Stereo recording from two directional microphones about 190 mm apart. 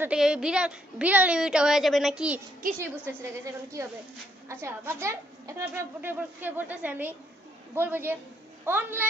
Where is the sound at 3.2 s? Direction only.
15° right (ahead or behind).